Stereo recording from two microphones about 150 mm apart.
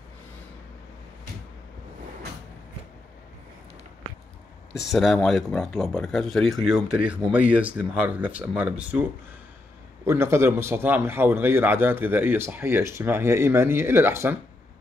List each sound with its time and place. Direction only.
4.7 s speech: centre (ahead or behind)
10.0 s a man's voice: 15° right (ahead or behind)